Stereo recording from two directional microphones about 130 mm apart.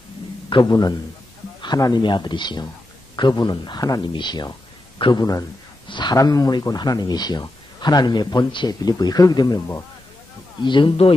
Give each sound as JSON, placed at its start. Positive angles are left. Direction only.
{"t": 0.5, "sound": "speech", "side_deg": 35}
{"t": 10.6, "sound": "speech", "side_deg": 40}